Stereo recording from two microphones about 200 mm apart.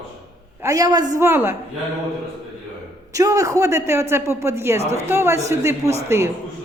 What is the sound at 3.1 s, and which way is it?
Speech, 15° right (ahead or behind).